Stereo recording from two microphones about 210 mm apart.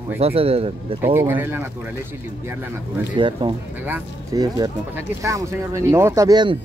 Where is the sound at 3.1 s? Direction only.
25° right (ahead or behind).